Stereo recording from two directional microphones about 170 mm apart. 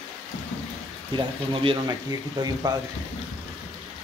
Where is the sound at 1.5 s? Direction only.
30° right (ahead or behind).